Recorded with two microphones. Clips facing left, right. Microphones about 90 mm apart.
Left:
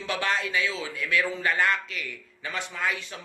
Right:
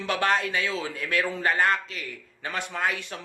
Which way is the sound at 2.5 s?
50° right (ahead or behind).